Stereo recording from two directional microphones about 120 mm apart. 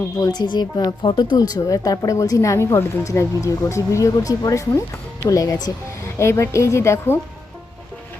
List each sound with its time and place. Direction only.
0.2 s speech: 35° left (ahead or behind)